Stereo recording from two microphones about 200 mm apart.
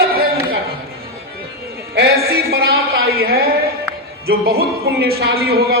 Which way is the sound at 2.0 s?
50° right (ahead or behind).